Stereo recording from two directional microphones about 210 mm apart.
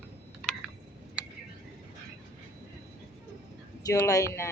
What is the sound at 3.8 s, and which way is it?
Speech, 15° left (ahead or behind).